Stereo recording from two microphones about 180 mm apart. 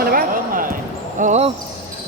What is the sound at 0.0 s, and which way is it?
Basketball bounce, 55° right (ahead or behind).